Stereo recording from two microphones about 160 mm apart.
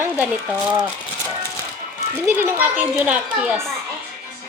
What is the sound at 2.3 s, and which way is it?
A child's voice, 15° right (ahead or behind).